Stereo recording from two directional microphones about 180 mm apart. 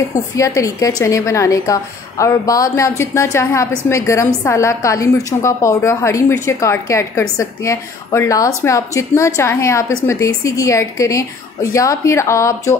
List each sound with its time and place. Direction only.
0.1 s a woman's voice: 20° left (ahead or behind)